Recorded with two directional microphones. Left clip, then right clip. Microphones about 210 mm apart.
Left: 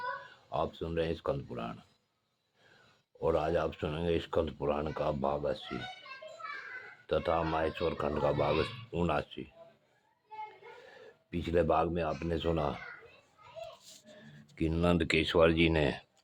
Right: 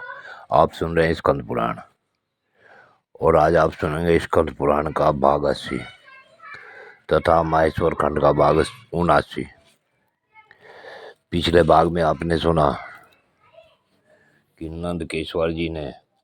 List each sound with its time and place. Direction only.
0.5 s speech: 40° right (ahead or behind)
3.2 s speech: 40° right (ahead or behind)
7.1 s speech: 40° right (ahead or behind)
10.8 s speech: 40° right (ahead or behind)
14.5 s speech: 10° left (ahead or behind)
14.8 s speech: 5° right (ahead or behind)